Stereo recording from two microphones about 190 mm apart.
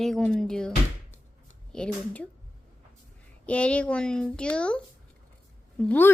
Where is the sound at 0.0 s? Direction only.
5° left (ahead or behind).